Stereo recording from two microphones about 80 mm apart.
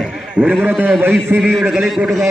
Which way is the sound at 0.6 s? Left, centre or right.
Right.